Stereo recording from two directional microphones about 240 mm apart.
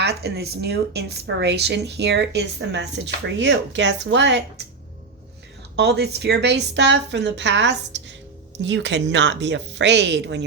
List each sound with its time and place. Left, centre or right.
0.0 s speech: right
5.7 s speech: right